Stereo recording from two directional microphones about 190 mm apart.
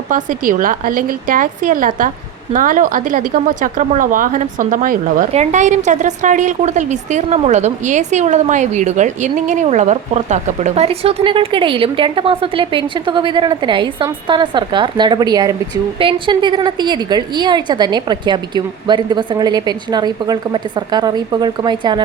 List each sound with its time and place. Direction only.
0.1 s a woman's voice: 45° right (ahead or behind); by 22.0 s 25° right (ahead or behind)